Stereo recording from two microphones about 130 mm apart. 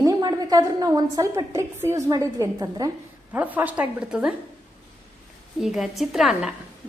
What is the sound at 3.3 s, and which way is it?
A woman's voice, 15° right (ahead or behind).